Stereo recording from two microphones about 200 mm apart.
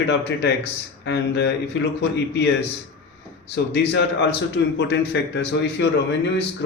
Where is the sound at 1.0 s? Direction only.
60° left (ahead or behind).